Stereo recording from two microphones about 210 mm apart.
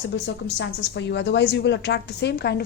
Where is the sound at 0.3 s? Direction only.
55° left (ahead or behind).